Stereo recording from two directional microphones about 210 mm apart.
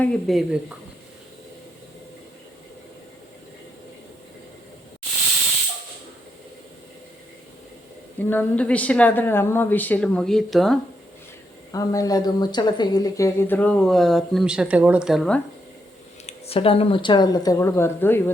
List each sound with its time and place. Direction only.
0.0 s speech: centre (ahead or behind)
8.2 s speech: 10° left (ahead or behind)
11.7 s speech: 15° left (ahead or behind); by 15.4 s centre (ahead or behind)
16.2 s speech: 25° left (ahead or behind); by 18.2 s 10° left (ahead or behind)